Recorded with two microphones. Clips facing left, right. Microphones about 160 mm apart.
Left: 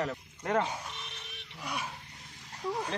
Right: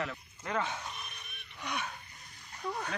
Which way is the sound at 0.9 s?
90° left.